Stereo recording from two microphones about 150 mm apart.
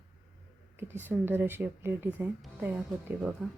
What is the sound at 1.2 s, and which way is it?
A woman's voice, 15° right (ahead or behind).